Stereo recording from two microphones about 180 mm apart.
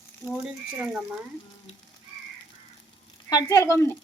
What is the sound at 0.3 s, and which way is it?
Speech, 10° right (ahead or behind).